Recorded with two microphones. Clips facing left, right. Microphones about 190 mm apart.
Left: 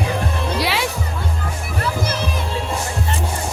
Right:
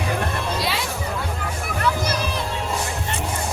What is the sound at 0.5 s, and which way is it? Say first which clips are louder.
Music: left 4 dB; 70° left (ahead or behind).